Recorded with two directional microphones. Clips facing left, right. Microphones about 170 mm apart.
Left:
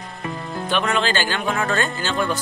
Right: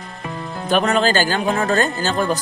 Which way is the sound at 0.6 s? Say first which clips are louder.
Right 5 dB; 40° right (ahead or behind).